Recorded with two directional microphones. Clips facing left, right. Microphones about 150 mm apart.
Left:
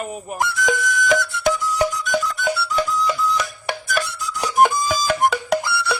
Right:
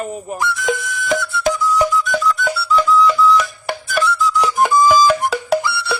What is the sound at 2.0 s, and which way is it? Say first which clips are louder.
Music: right 4 dB; 45° left (ahead or behind).